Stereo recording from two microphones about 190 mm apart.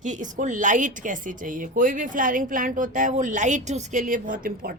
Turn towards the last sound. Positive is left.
turn(degrees=-45)  # may be behind; listen again after turning